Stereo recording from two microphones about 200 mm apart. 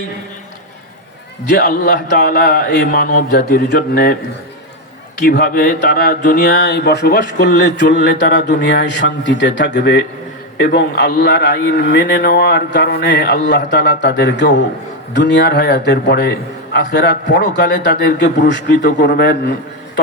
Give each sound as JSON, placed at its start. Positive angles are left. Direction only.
{"t": 1.5, "sound": "speech", "side_deg": 50}
{"t": 5.2, "sound": "speech", "side_deg": 50}